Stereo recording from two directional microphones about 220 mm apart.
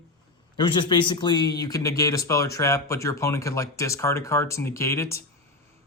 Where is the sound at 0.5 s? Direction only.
20° left (ahead or behind).